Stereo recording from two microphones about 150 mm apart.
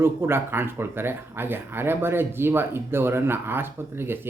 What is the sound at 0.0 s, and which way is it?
Speech, 15° right (ahead or behind).